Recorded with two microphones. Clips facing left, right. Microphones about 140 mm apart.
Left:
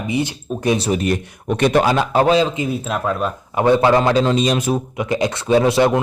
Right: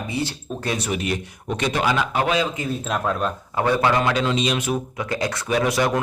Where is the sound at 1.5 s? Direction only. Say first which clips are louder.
Left 8 dB; 55° left (ahead or behind).